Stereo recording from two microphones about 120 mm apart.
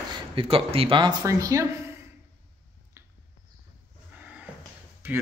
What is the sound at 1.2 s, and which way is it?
Speech, 25° right (ahead or behind).